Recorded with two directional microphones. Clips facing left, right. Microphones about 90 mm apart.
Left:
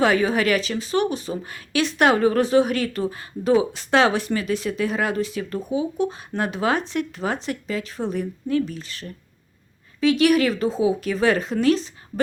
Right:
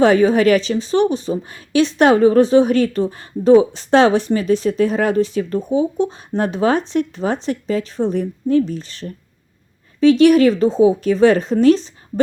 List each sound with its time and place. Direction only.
0.0 s speech: 35° right (ahead or behind)